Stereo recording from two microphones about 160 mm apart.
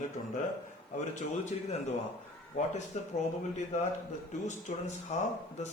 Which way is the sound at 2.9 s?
45° left (ahead or behind).